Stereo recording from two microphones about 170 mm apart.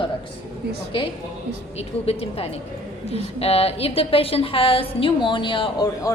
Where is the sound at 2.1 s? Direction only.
35° left (ahead or behind).